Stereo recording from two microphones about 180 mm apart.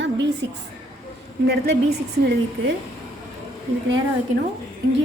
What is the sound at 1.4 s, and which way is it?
Speech, 65° right (ahead or behind).